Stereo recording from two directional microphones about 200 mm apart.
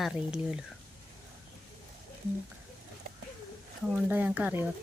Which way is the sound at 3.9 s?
10° right (ahead or behind).